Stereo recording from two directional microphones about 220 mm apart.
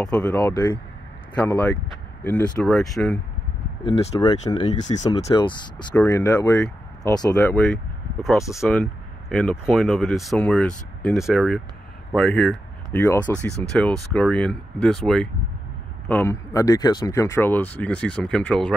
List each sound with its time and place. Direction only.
0.0 s speech: 5° left (ahead or behind)
3.8 s speech: 20° left (ahead or behind); by 18.8 s 5° left (ahead or behind)